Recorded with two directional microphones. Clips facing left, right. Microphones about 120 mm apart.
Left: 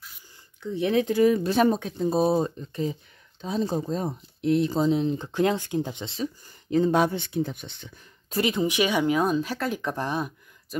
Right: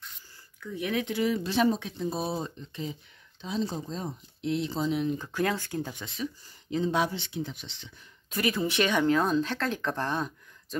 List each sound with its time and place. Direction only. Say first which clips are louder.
0.6 s speech: left 7 dB; 30° left (ahead or behind)
1.1 s speech: left 6 dB; 45° left (ahead or behind); by 6.2 s 25° left (ahead or behind)
6.2 s speech: left 2 dB; 55° left (ahead or behind)
8.3 s speech: left 4 dB; 20° left (ahead or behind)